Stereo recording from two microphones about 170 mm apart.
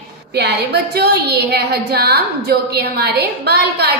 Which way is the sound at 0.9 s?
70° right (ahead or behind).